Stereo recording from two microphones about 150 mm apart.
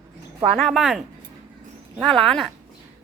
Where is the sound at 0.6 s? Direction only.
Centre (ahead or behind).